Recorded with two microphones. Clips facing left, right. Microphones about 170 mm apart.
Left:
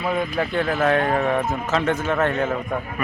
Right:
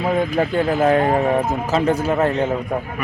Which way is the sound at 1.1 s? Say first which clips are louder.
Right 3 dB; 30° right (ahead or behind).